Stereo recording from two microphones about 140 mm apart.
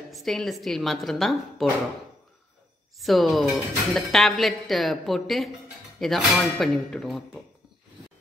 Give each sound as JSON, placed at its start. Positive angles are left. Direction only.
{"t": 0.1, "sound": "speech", "side_deg": 0}
{"t": 3.0, "sound": "speech", "side_deg": 0}